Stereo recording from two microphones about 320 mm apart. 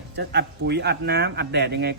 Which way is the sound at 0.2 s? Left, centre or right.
Right.